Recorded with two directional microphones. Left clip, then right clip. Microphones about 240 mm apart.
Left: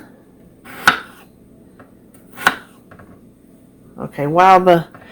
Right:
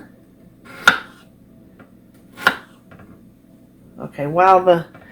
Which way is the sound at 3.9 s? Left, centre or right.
Left.